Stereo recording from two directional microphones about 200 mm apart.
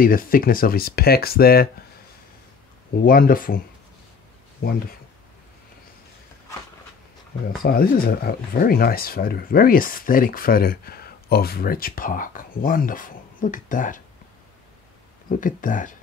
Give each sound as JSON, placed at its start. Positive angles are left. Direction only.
{"t": 0.0, "sound": "speech", "side_deg": 45}
{"t": 3.0, "sound": "speech", "side_deg": 45}
{"t": 7.6, "sound": "speech", "side_deg": 50}
{"t": 15.2, "sound": "speech", "side_deg": 40}